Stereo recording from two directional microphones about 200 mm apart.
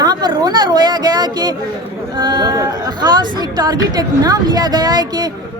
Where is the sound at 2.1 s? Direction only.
20° right (ahead or behind).